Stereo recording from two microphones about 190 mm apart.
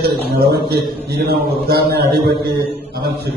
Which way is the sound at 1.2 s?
55° right (ahead or behind).